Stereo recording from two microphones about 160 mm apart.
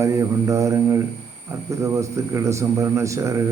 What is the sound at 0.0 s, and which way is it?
A man's voice, 20° right (ahead or behind).